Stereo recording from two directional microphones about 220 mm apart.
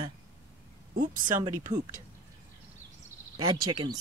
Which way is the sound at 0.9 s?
40° right (ahead or behind).